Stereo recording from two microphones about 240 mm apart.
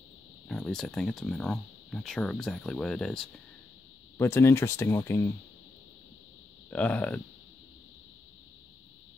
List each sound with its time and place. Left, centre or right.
0.5 s speech: centre
6.7 s speech: centre